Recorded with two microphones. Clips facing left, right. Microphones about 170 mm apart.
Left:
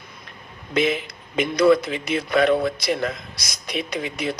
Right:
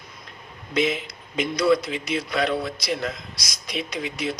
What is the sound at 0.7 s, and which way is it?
A man's voice, 55° left (ahead or behind).